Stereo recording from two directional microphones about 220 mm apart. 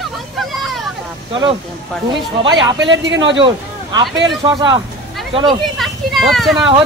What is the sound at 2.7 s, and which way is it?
Speech, 55° right (ahead or behind).